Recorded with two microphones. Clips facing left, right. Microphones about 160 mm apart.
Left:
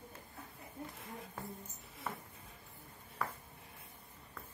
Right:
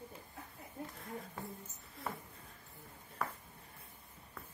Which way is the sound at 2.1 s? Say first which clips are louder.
Right 1 dB; centre (ahead or behind).